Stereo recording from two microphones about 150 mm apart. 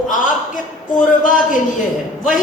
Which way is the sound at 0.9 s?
60° left (ahead or behind).